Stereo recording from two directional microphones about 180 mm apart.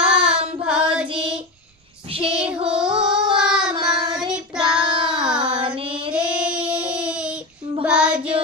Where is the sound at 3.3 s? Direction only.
5° right (ahead or behind).